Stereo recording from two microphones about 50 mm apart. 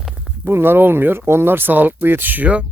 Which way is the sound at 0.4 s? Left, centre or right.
Right.